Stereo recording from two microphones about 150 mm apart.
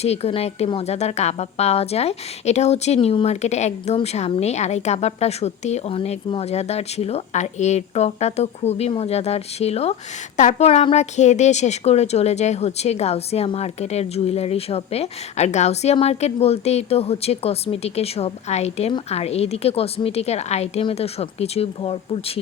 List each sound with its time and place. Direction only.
0.0 s a woman's voice: 45° left (ahead or behind)